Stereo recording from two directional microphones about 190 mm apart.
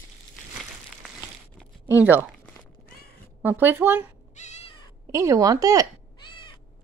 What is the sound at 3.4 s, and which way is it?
Speech, 10° right (ahead or behind).